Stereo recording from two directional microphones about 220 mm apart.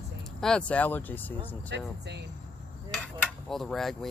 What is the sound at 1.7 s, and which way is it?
Speech, 50° right (ahead or behind).